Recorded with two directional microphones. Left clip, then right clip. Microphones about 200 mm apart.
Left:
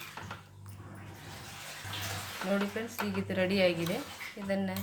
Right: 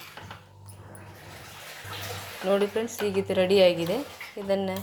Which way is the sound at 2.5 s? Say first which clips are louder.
Right 10 dB; 25° right (ahead or behind).